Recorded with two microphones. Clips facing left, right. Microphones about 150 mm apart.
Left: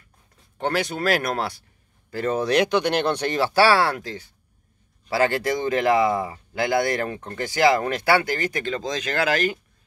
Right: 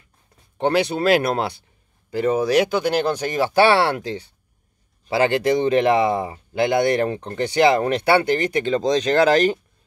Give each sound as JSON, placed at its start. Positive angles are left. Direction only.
{"t": 0.8, "sound": "speech", "side_deg": -25}